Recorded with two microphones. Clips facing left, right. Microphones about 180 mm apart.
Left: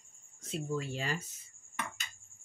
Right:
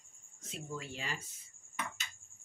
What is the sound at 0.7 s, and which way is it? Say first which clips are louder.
Speech: left 5 dB; 40° left (ahead or behind).